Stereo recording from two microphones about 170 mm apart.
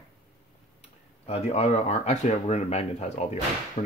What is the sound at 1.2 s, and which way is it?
Speech, 40° left (ahead or behind).